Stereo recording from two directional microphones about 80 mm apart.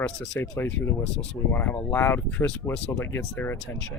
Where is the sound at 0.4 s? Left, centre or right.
Left.